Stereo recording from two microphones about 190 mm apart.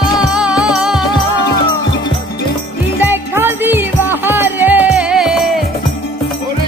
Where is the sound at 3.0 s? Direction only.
10° right (ahead or behind).